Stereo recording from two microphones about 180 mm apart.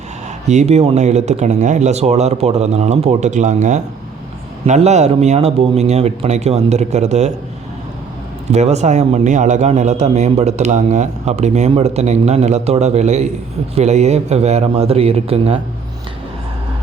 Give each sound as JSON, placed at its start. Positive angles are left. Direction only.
{"t": 0.4, "sound": "a man's voice", "side_deg": -40}
{"t": 8.4, "sound": "a man's voice", "side_deg": -40}